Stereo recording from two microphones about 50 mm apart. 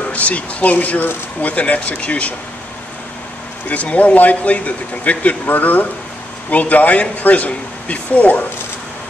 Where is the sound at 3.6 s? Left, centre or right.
Left.